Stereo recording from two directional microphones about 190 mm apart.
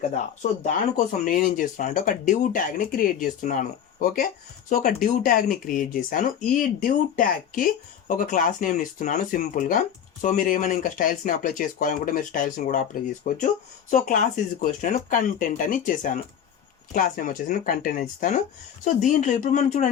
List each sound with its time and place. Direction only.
0.6 s speech: 40° left (ahead or behind)